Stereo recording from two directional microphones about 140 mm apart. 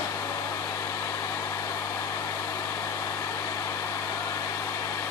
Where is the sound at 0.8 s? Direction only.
20° left (ahead or behind).